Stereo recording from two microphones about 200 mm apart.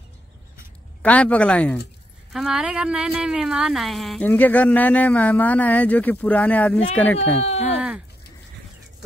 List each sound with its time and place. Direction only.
1.0 s speech: 5° left (ahead or behind)
7.3 s speech: 30° left (ahead or behind)